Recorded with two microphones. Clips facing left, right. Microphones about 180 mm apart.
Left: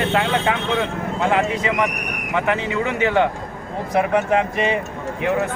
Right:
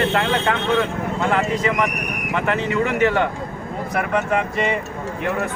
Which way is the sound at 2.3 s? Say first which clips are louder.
Even; 15° left (ahead or behind).